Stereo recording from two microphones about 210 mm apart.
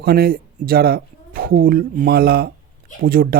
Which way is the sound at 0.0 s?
45° right (ahead or behind).